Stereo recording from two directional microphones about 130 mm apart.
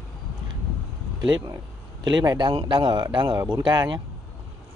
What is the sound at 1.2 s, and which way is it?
Speech, 30° right (ahead or behind).